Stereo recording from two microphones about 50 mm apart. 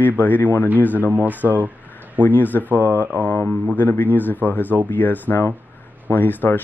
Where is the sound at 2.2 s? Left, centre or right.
Left.